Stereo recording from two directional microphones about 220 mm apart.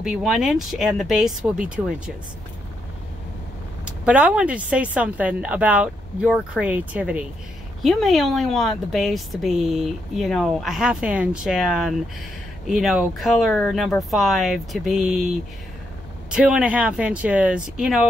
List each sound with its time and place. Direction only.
0.0 s a woman's voice: centre (ahead or behind)
3.8 s a woman's voice: 5° right (ahead or behind)
16.3 s a woman's voice: 5° right (ahead or behind)